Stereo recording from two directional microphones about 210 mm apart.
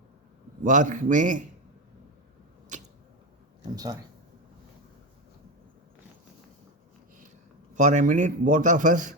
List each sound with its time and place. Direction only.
0.6 s a man's voice: 35° right (ahead or behind)
2.7 s arrow: 35° right (ahead or behind)
7.7 s a man's voice: 35° right (ahead or behind)